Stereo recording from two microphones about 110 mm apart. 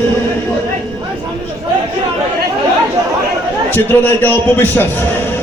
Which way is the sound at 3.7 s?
20° left (ahead or behind).